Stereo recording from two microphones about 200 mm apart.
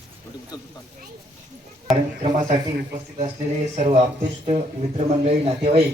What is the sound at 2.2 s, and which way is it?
Speech, 35° right (ahead or behind).